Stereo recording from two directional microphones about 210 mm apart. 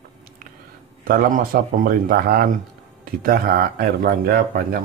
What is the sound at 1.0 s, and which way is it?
Speech, 45° right (ahead or behind).